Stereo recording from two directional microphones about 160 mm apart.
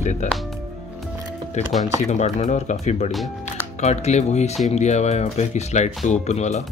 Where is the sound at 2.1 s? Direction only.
45° left (ahead or behind).